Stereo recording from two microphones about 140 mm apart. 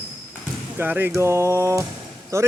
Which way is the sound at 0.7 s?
15° right (ahead or behind).